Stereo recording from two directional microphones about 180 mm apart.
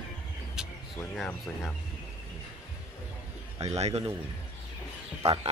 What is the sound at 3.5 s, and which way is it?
Speech, 35° right (ahead or behind).